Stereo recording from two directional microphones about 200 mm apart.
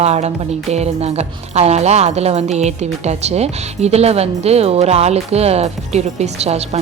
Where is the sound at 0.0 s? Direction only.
35° right (ahead or behind).